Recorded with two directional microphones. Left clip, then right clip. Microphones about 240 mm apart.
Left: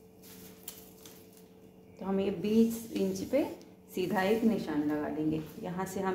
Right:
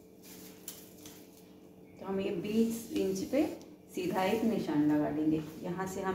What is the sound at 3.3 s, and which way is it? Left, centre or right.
Speech, left.